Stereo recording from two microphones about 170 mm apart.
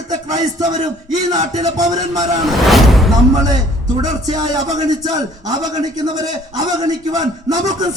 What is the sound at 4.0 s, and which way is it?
A man's voice, 25° right (ahead or behind).